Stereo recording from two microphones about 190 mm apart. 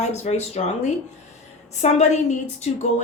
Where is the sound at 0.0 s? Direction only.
35° left (ahead or behind).